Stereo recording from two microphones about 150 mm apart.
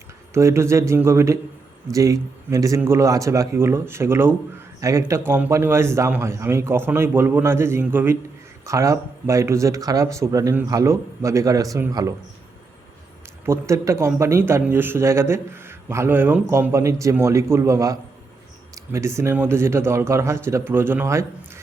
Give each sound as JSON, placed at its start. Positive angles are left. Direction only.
{"t": 0.3, "sound": "a man's voice", "side_deg": -20}
{"t": 13.4, "sound": "a man's voice", "side_deg": -20}